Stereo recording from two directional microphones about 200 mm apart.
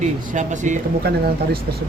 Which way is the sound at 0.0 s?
40° right (ahead or behind).